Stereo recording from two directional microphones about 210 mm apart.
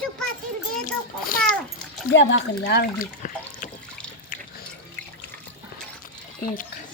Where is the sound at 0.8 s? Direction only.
40° left (ahead or behind).